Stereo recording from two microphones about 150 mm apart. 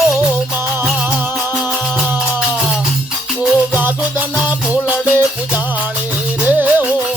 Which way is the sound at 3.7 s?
10° right (ahead or behind).